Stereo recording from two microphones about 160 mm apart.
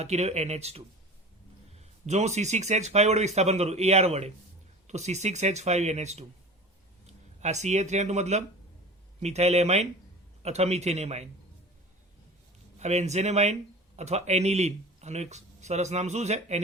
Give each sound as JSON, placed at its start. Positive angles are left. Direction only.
{"t": 0.0, "sound": "speech", "side_deg": -45}
{"t": 2.0, "sound": "speech", "side_deg": -45}
{"t": 12.8, "sound": "speech", "side_deg": -45}